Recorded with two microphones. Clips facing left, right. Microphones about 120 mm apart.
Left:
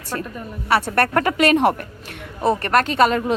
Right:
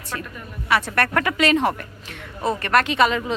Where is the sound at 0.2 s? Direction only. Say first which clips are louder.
Left 5 dB; 35° left (ahead or behind).